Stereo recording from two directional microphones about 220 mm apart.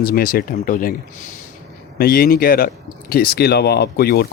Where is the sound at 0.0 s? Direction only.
40° left (ahead or behind).